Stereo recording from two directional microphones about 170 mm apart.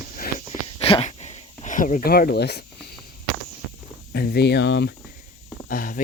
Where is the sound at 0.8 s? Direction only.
35° left (ahead or behind); by 2.6 s 75° left (ahead or behind).